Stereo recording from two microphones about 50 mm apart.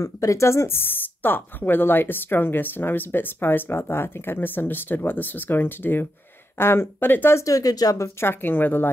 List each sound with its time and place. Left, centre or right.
0.0 s a woman's voice: left